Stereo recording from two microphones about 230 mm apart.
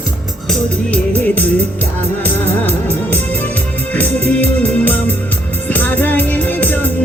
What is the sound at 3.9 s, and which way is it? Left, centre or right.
Organ, centre.